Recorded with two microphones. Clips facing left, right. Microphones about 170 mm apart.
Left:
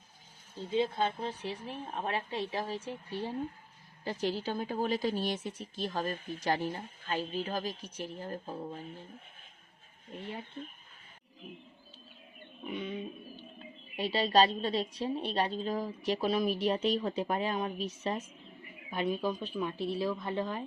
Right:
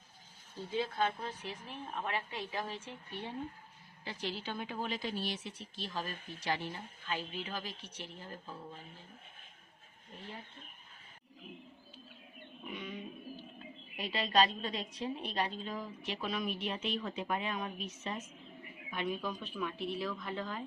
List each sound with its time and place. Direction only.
0.7 s a woman's voice: 25° left (ahead or behind); by 8.7 s 45° left (ahead or behind)
12.7 s a sound: 25° left (ahead or behind)
13.9 s a woman's voice: 30° left (ahead or behind)